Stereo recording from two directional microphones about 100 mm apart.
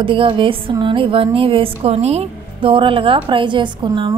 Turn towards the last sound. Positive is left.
turn(degrees=-50)  # may be behind; listen again after turning